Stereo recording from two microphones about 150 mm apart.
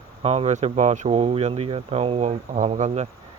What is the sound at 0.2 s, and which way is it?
Speech, 45° right (ahead or behind).